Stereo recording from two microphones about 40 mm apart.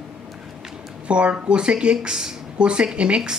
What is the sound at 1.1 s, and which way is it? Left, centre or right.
Speech, right.